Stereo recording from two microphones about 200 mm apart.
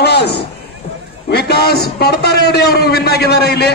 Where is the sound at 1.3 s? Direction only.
55° left (ahead or behind).